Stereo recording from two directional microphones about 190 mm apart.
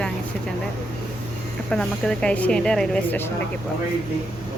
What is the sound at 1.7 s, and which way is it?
A woman's voice, 5° left (ahead or behind).